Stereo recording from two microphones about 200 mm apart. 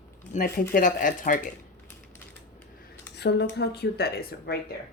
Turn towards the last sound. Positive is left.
turn(degrees=50)  # may be behind; listen again after turning